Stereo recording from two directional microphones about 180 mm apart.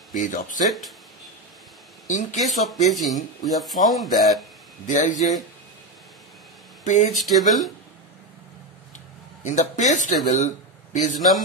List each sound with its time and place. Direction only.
0.1 s speech: 45° left (ahead or behind)
0.7 s speech: centre (ahead or behind)
2.0 s speech: 40° left (ahead or behind)
2.7 s speech: centre (ahead or behind)
4.8 s speech: 45° left (ahead or behind)
6.8 s a sound: 40° left (ahead or behind)
7.1 s speech: centre (ahead or behind)
9.4 s speech: 40° left (ahead or behind)
11.1 s speech: centre (ahead or behind)